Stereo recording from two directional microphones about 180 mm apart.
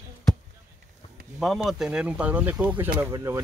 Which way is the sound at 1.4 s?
Centre (ahead or behind).